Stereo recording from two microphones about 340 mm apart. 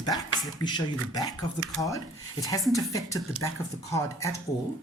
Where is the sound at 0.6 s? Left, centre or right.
Centre.